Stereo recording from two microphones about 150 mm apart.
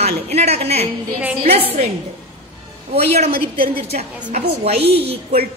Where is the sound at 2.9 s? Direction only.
45° right (ahead or behind).